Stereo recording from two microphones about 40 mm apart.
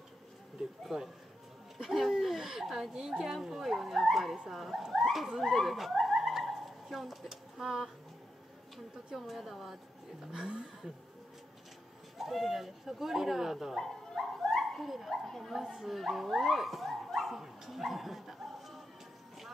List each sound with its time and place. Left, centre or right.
1.8 s laughter: centre
2.7 s speech: centre
5.4 s a sound: centre
9.1 s speech: centre
10.3 s speech: centre
12.2 s speech: centre
13.7 s speech: centre
14.6 s speech: centre